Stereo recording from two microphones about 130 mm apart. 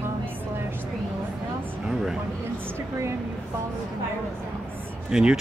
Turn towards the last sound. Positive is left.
turn(degrees=-5)  # may be behind; listen again after turning